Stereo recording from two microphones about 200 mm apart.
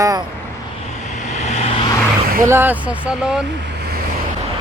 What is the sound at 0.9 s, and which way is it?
Vehicle, 35° left (ahead or behind).